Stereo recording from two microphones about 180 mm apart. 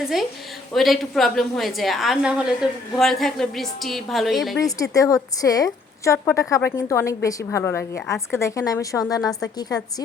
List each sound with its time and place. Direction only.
0.0 s a woman's voice: centre (ahead or behind)
4.5 s a woman's voice: 20° left (ahead or behind)